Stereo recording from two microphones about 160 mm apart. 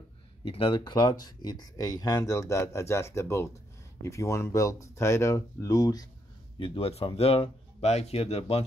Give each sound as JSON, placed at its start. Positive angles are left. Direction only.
{"t": 0.5, "sound": "speech", "side_deg": 35}
{"t": 6.6, "sound": "speech", "side_deg": 35}